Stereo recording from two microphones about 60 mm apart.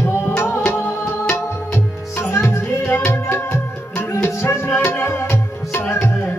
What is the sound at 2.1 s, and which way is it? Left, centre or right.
Music, left.